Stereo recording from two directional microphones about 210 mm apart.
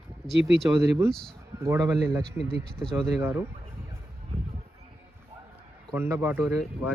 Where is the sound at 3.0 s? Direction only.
10° right (ahead or behind).